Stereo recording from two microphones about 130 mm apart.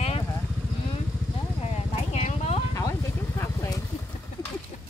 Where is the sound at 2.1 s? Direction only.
55° left (ahead or behind).